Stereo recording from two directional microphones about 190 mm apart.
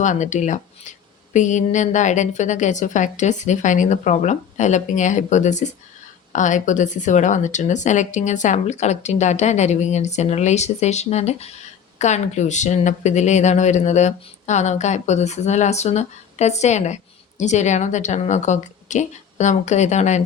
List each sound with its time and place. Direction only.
0.0 s speech: 40° left (ahead or behind)